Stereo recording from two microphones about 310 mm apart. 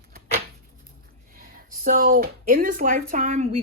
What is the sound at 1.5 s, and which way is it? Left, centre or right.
Speech, right.